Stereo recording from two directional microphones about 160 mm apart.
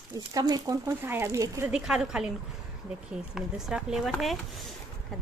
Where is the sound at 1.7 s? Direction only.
5° right (ahead or behind).